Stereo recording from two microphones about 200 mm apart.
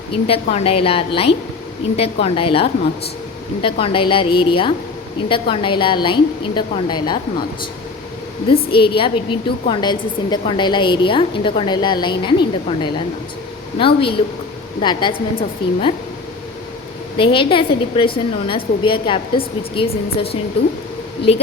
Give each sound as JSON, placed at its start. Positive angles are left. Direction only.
{"t": 0.1, "sound": "a woman's voice", "side_deg": 30}
{"t": 8.7, "sound": "a woman's voice", "side_deg": 25}
{"t": 17.2, "sound": "a woman's voice", "side_deg": 25}